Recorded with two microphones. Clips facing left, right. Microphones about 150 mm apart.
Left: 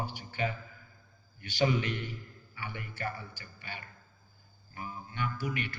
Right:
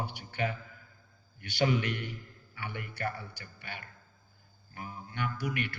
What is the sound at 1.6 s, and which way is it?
A man's voice, 60° right (ahead or behind).